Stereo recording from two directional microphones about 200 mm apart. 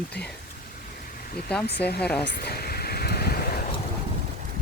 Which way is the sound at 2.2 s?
55° left (ahead or behind).